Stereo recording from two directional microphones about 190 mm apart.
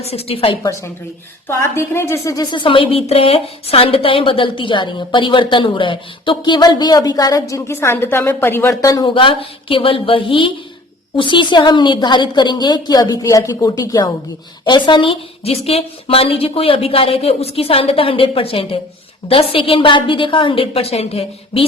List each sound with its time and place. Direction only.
0.0 s a woman's voice: 30° left (ahead or behind)
0.6 s a woman's voice: 15° left (ahead or behind); by 21.6 s 30° left (ahead or behind)